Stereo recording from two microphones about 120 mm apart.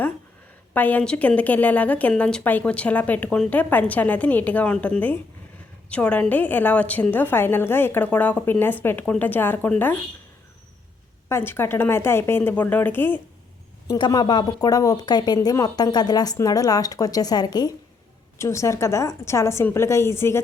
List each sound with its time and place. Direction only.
0.7 s a woman's voice: 15° left (ahead or behind)
11.3 s a woman's voice: 20° left (ahead or behind)
13.8 s a woman's voice: 30° left (ahead or behind)